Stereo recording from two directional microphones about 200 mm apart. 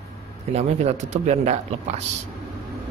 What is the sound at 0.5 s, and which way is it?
Speech, 35° right (ahead or behind).